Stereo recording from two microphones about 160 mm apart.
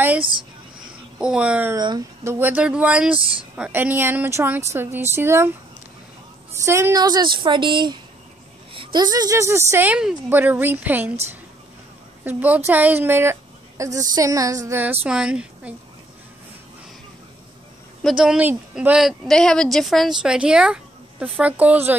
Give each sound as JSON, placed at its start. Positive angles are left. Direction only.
{"t": 0.2, "sound": "speech", "side_deg": -30}
{"t": 1.1, "sound": "speech", "side_deg": -5}
{"t": 1.8, "sound": "speech", "side_deg": -25}
{"t": 6.5, "sound": "a woman's voice", "side_deg": -15}
{"t": 12.3, "sound": "speech", "side_deg": -10}
{"t": 18.0, "sound": "speech", "side_deg": -5}